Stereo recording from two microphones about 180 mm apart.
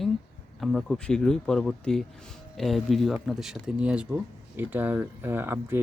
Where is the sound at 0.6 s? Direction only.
5° left (ahead or behind).